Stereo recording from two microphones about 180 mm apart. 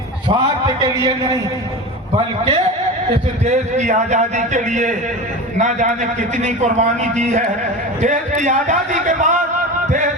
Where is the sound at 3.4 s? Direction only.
40° right (ahead or behind).